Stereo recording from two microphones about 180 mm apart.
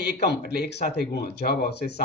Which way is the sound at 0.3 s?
65° left (ahead or behind).